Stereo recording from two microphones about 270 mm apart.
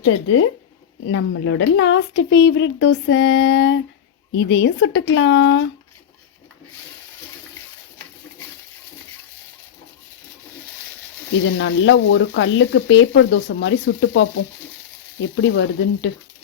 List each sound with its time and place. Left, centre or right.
0.0 s speech: left
11.5 s speech: left
15.4 s speech: left